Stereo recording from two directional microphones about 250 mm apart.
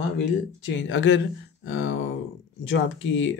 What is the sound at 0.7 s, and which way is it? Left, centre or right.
Speech, left.